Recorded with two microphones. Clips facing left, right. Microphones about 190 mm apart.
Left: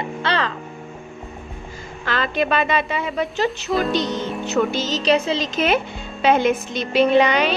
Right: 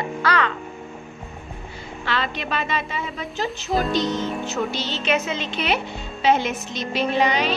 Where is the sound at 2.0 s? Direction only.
45° left (ahead or behind); by 4.8 s 65° left (ahead or behind).